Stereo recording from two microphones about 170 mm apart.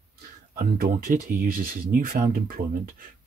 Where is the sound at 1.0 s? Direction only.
50° right (ahead or behind).